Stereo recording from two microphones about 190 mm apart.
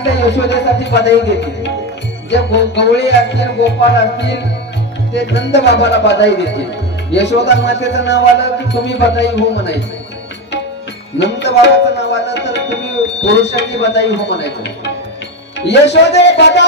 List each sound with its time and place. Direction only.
0.1 s music: 65° left (ahead or behind)
11.1 s music: 65° left (ahead or behind)
13.2 s speech: 65° left (ahead or behind)
15.6 s speech: 65° left (ahead or behind)